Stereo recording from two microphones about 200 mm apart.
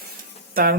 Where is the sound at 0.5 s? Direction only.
45° right (ahead or behind).